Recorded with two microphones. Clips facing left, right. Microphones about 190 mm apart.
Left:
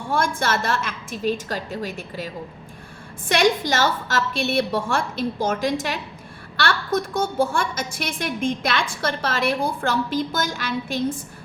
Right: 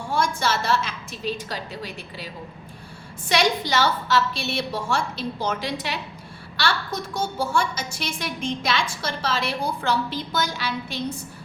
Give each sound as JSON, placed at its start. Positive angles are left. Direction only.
{"t": 0.1, "sound": "a woman's voice", "side_deg": 55}